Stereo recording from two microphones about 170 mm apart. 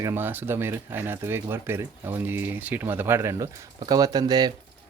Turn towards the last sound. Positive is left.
turn(degrees=-25)  # may be behind; listen again after turning